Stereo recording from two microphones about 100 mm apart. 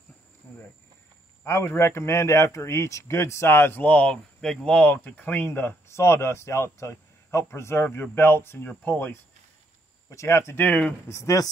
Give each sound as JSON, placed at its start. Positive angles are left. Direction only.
{"t": 0.5, "sound": "cricket", "side_deg": 20}
{"t": 1.4, "sound": "speech", "side_deg": 25}
{"t": 11.1, "sound": "speech", "side_deg": 30}